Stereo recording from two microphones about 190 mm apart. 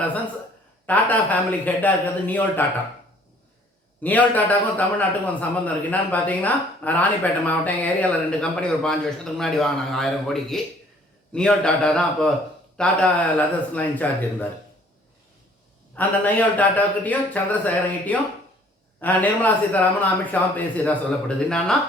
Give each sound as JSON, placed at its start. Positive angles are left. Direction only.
{"t": 0.9, "sound": "speech", "side_deg": 10}
{"t": 4.0, "sound": "a man's voice", "side_deg": 10}
{"t": 16.0, "sound": "speech", "side_deg": 10}